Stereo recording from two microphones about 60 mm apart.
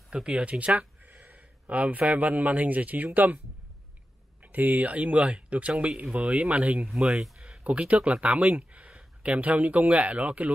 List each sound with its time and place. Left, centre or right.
0.1 s speech: centre
4.4 s speech: right
7.2 s speech: centre